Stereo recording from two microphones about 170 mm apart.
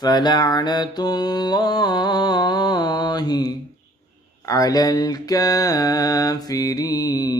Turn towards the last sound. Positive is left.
turn(degrees=20)  # may be behind; listen again after turning